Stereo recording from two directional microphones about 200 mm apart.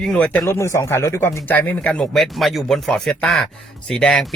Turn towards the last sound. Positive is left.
turn(degrees=5)  # may be behind; listen again after turning